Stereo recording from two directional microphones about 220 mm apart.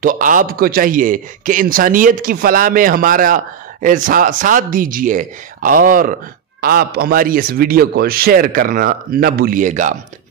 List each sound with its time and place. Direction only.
0.0 s a man's voice: 35° right (ahead or behind)